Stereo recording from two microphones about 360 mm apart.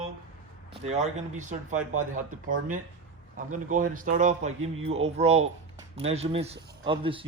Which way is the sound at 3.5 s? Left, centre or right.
Right.